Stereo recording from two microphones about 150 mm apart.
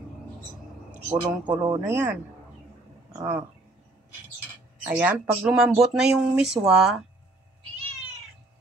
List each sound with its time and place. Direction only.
0.9 s a man's voice: 10° right (ahead or behind)
4.8 s speech: 10° right (ahead or behind)